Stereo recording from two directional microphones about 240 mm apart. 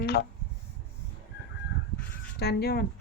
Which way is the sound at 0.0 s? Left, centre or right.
Left.